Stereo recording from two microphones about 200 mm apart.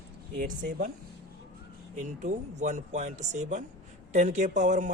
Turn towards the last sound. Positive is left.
turn(degrees=-40)  # may be behind; listen again after turning